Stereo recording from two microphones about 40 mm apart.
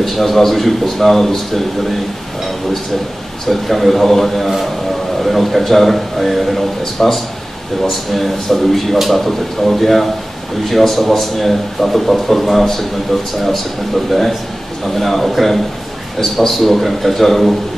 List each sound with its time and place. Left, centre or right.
0.0 s a man's voice: centre
3.4 s a man's voice: centre
15.0 s a man's voice: centre